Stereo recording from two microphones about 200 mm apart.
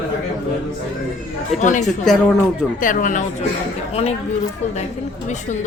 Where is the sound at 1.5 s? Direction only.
35° left (ahead or behind).